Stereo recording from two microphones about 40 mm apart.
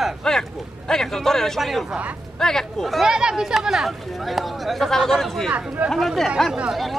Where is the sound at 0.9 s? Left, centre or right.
Centre.